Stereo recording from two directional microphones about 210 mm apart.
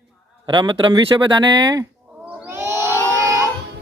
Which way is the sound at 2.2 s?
10° right (ahead or behind).